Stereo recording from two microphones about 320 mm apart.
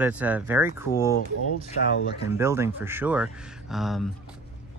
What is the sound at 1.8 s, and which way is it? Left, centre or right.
Speech, left.